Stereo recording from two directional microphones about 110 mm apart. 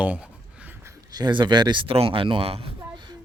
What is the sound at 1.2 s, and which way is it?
Speech, 45° right (ahead or behind).